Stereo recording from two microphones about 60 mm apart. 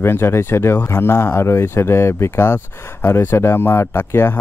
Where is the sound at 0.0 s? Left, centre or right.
Left.